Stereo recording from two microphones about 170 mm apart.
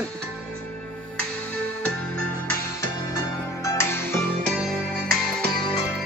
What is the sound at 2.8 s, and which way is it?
Music, 20° left (ahead or behind).